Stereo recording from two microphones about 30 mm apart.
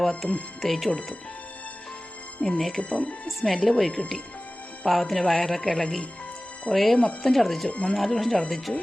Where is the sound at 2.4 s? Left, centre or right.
Left.